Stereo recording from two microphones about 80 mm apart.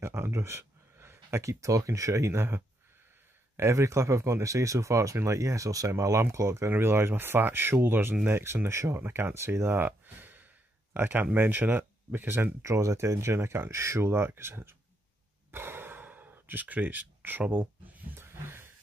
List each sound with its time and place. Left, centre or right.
0.0 s speech: right
12.6 s speech: right
15.5 s sigh: right